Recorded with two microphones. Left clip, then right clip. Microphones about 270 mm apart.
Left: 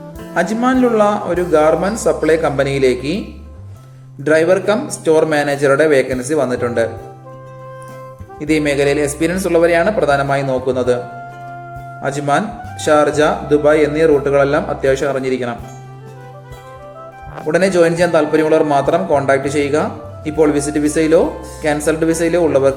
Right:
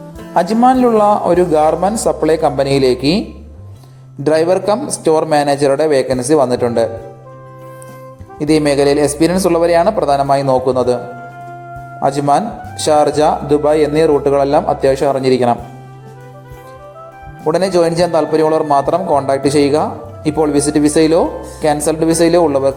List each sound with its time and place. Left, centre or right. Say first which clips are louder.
0.3 s a man's voice: right 4 dB; right
8.4 s a man's voice: right 3 dB; centre
12.0 s a man's voice: right 4 dB; centre
17.5 s a man's voice: even; centre